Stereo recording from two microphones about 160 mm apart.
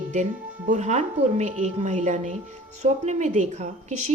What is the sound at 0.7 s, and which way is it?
A woman's voice, 45° right (ahead or behind).